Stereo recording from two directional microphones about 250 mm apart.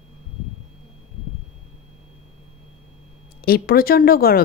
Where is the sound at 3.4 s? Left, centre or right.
Left.